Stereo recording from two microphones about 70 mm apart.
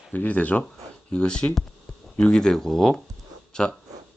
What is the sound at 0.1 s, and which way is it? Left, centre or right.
Speech, left.